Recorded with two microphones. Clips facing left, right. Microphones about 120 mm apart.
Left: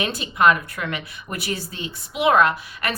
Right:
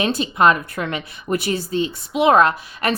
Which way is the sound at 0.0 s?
25° right (ahead or behind).